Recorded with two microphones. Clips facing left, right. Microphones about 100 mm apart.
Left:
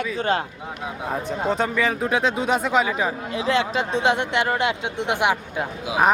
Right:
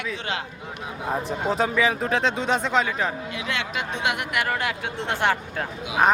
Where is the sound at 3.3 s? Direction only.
30° left (ahead or behind).